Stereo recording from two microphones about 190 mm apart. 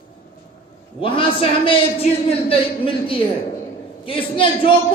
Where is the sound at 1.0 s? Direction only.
30° left (ahead or behind).